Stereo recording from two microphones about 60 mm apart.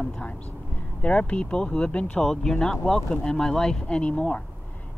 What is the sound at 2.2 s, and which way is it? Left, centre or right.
Speech, centre.